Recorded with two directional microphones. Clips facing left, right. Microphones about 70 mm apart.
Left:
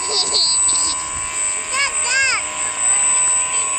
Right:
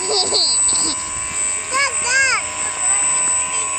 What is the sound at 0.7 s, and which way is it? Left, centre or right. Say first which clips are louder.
Vehicle: right 1 dB; right.